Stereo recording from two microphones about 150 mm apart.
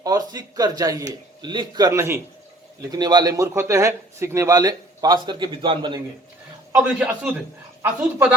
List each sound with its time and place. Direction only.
0.0 s a man's voice: 25° right (ahead or behind)
2.9 s a man's voice: 30° right (ahead or behind)
6.7 s a man's voice: 10° right (ahead or behind)